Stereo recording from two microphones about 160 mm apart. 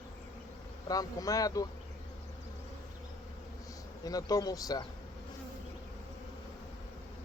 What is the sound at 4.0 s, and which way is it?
Speech, 25° left (ahead or behind).